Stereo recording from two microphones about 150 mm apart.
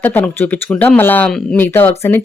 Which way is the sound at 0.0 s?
10° left (ahead or behind).